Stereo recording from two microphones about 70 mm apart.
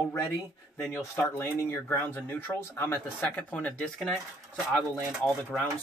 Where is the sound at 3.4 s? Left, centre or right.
Centre.